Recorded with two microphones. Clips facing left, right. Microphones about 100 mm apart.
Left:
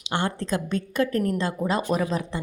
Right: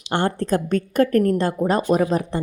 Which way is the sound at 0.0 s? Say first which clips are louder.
Right 5 dB; 55° right (ahead or behind).